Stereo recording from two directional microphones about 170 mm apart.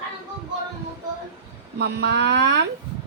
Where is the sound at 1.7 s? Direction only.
75° right (ahead or behind).